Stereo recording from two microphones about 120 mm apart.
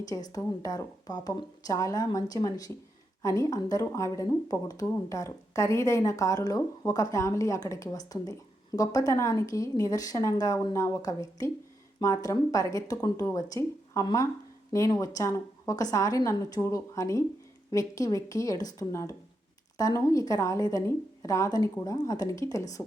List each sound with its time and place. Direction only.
0.1 s a woman's voice: 30° left (ahead or behind)